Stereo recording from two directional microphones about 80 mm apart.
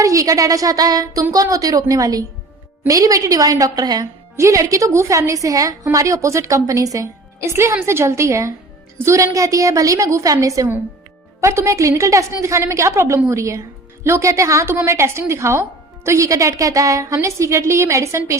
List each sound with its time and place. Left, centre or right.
0.0 s speech: right
4.4 s a woman's voice: right